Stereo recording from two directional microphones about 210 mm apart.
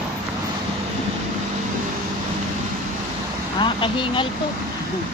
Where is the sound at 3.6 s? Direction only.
25° left (ahead or behind).